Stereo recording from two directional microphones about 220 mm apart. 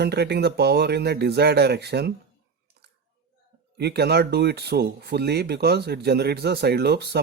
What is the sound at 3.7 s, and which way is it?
Speech, 45° right (ahead or behind).